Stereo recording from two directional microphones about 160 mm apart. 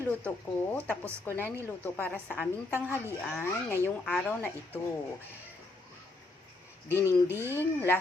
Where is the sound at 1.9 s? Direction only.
10° left (ahead or behind).